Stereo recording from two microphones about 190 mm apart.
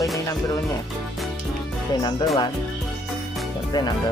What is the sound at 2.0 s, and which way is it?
Speech, 25° left (ahead or behind).